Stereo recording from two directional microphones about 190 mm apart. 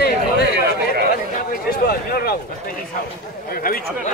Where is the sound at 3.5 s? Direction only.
50° left (ahead or behind).